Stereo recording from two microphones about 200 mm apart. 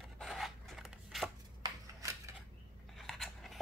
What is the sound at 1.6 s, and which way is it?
Shuffling cards, 15° right (ahead or behind).